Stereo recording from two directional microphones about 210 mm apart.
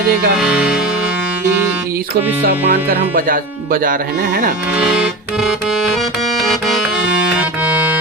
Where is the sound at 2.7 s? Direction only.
45° right (ahead or behind).